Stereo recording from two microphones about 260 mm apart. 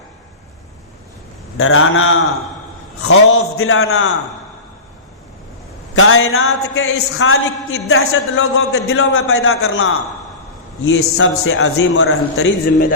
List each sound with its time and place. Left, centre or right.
1.5 s a man's voice: left
5.9 s a man's voice: left